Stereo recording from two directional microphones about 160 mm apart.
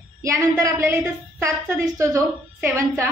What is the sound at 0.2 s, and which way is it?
A woman's voice, 20° right (ahead or behind).